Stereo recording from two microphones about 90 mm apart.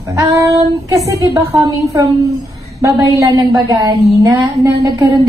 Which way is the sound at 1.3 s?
55° right (ahead or behind).